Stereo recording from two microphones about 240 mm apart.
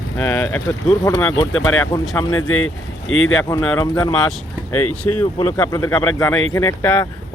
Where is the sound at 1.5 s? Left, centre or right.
Left.